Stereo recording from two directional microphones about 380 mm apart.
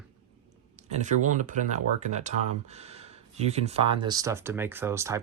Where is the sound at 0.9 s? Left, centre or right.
Centre.